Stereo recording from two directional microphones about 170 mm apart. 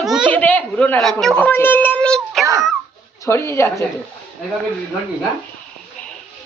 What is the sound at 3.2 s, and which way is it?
Speech, 15° left (ahead or behind).